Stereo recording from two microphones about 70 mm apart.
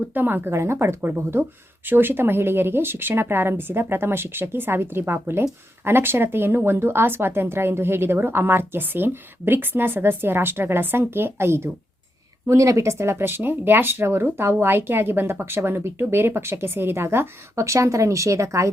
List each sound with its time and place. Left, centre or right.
0.1 s speech: right
12.5 s speech: right